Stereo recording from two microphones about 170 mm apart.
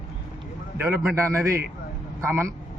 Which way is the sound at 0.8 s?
10° right (ahead or behind).